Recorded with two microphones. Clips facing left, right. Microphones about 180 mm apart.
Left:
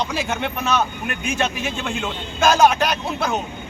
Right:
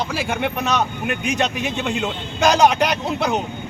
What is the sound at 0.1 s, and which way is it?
Speech, 15° right (ahead or behind).